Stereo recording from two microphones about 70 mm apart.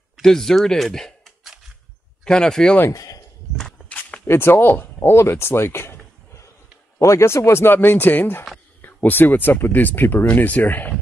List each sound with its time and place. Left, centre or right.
0.2 s speech: centre
2.9 s speech: left
3.9 s walk: left
4.3 s speech: left
5.2 s a sound: left
7.0 s speech: left